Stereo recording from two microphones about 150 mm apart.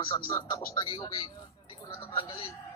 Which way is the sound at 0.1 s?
25° left (ahead or behind).